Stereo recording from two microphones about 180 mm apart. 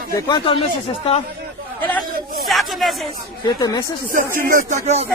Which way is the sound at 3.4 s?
25° left (ahead or behind).